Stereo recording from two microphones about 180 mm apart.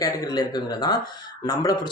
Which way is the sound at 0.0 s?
20° left (ahead or behind).